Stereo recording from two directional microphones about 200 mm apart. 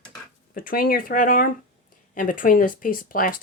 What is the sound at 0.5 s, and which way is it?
Speech, 45° left (ahead or behind).